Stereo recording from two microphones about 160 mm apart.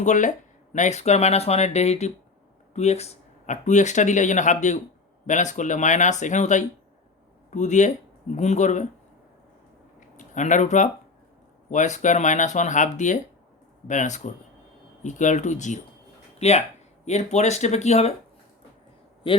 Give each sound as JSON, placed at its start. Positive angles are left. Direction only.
{"t": 0.0, "sound": "speech", "side_deg": 50}
{"t": 10.2, "sound": "speech", "side_deg": 50}